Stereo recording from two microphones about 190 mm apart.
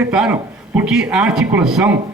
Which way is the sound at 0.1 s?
5° right (ahead or behind).